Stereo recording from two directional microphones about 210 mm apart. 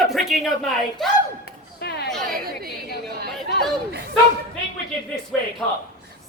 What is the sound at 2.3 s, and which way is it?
Chatter, 45° right (ahead or behind).